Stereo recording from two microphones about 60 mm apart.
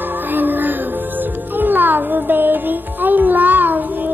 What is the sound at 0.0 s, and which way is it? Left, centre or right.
Music, right.